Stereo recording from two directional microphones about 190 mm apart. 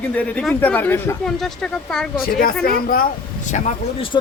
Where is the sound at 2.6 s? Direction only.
50° left (ahead or behind).